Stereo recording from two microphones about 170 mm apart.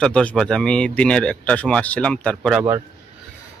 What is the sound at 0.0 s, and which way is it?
Speech, 5° left (ahead or behind).